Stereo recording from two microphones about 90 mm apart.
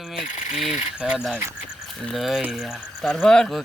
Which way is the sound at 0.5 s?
10° right (ahead or behind).